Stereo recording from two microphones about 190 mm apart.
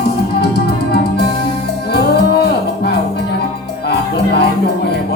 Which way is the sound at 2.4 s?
60° left (ahead or behind).